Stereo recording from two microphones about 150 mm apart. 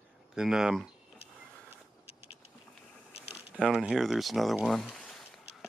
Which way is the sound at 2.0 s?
40° left (ahead or behind).